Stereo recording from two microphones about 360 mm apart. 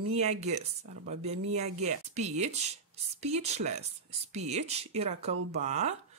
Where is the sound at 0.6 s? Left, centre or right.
Centre.